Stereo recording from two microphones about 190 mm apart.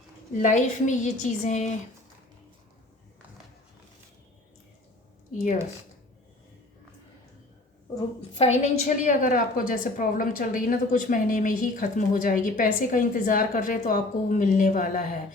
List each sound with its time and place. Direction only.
0.3 s a woman's voice: 40° left (ahead or behind)
8.4 s a woman's voice: 35° left (ahead or behind)